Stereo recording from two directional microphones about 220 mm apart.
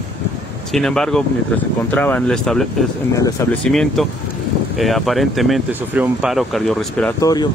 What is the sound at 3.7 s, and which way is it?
Speech, centre (ahead or behind).